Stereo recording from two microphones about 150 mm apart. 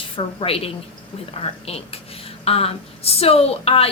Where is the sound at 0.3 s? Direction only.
40° left (ahead or behind).